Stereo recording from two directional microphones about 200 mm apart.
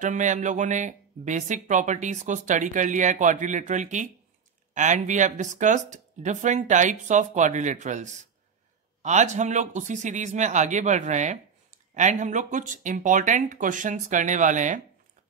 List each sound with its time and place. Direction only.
0.0 s speech: 40° right (ahead or behind)